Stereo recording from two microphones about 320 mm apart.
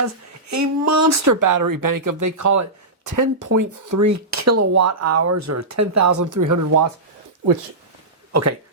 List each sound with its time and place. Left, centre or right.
0.0 s speech: right
8.3 s speech: right